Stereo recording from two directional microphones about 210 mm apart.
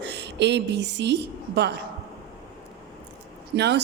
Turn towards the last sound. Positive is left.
turn(degrees=-50)  # may be behind; listen again after turning